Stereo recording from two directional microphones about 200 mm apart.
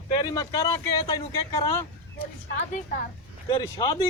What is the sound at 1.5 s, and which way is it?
Speech, 15° left (ahead or behind).